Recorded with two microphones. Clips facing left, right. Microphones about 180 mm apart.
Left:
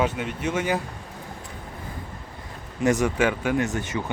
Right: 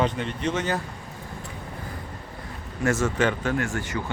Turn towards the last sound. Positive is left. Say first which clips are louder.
# left 2 dB
turn(degrees=20)  # may be behind; listen again after turning